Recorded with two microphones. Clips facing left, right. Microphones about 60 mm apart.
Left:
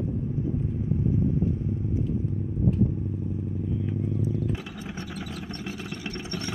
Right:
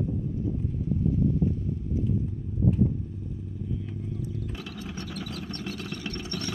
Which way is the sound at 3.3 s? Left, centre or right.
Left.